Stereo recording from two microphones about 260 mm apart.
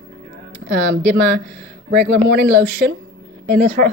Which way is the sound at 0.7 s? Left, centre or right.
Right.